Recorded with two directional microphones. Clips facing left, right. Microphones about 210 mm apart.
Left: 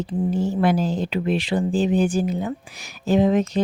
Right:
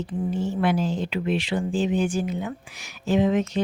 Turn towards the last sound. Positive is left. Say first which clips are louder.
# left 3 dB
turn(degrees=35)  # may be behind; listen again after turning